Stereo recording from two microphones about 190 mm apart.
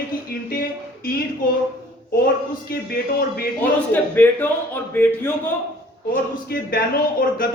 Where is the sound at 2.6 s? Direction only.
55° left (ahead or behind).